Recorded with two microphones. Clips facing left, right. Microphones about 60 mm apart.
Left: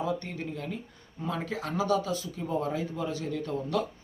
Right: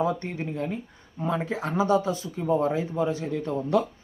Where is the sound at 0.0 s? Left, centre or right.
Right.